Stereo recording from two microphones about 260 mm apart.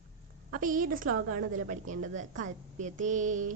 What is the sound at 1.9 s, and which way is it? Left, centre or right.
A woman's voice, right.